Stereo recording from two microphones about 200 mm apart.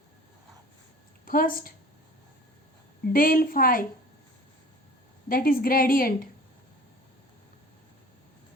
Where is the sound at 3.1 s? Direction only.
45° left (ahead or behind).